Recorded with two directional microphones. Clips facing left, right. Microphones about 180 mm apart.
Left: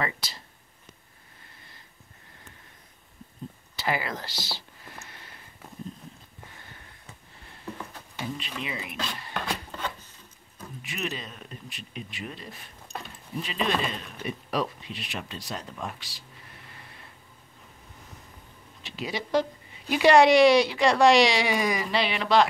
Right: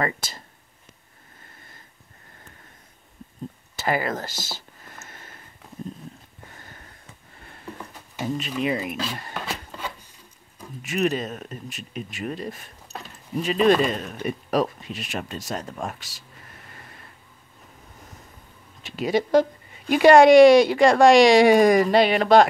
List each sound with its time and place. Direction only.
0.0 s speech: 50° right (ahead or behind)
3.7 s speech: 45° right (ahead or behind)
5.0 s a sound: 45° right (ahead or behind)
8.2 s speech: 45° right (ahead or behind)
9.3 s rub: 5° right (ahead or behind)
10.8 s speech: 45° right (ahead or behind)
18.8 s speech: 50° right (ahead or behind)